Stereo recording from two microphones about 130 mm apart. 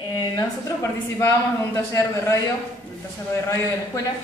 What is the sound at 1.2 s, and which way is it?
A man's voice, 25° left (ahead or behind).